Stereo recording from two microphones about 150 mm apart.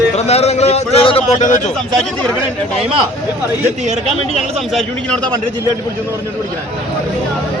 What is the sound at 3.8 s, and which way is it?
Speech, 50° right (ahead or behind).